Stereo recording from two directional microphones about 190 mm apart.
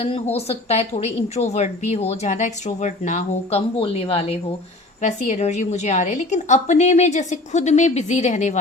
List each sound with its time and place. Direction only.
0.0 s a woman's voice: 30° left (ahead or behind)
4.9 s a woman's voice: 40° left (ahead or behind)